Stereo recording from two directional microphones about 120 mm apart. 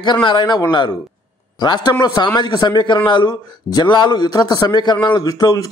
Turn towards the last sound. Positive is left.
turn(degrees=30)  # may be behind; listen again after turning